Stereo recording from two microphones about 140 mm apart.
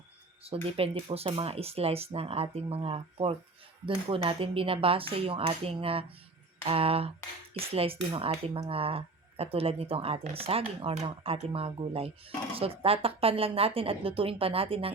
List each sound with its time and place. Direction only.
0.4 s speech: 45° right (ahead or behind)